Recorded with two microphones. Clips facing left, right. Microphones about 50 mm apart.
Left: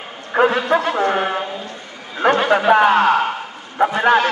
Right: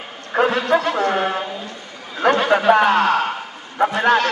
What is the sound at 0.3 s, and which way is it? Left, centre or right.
A man's voice, centre.